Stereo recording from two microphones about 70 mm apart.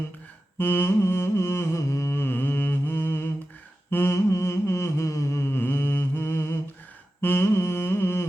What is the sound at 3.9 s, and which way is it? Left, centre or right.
Humming, left.